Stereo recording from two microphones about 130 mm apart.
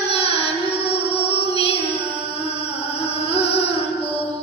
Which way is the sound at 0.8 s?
50° left (ahead or behind).